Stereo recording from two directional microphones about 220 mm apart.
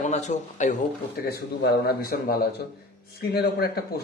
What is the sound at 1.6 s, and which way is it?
A man's voice, 45° left (ahead or behind).